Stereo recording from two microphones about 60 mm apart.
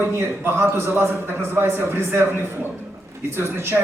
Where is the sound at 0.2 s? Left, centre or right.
Right.